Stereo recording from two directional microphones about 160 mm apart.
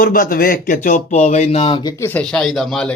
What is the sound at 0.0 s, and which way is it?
Speech, 60° left (ahead or behind).